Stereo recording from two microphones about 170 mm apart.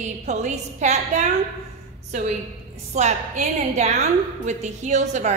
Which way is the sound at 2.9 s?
45° right (ahead or behind).